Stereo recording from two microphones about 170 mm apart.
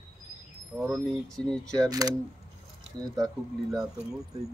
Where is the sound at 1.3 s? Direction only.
5° left (ahead or behind).